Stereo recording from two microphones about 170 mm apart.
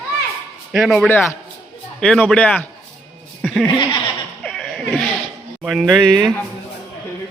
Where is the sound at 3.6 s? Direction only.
25° left (ahead or behind).